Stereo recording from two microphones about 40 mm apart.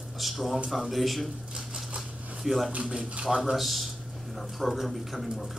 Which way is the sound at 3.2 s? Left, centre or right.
Centre.